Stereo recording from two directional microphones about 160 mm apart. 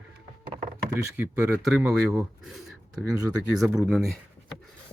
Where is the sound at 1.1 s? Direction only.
10° right (ahead or behind).